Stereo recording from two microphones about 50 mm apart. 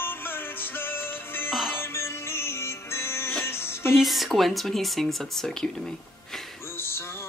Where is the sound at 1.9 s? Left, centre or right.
Left.